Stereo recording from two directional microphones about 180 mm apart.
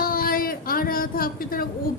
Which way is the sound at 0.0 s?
55° left (ahead or behind).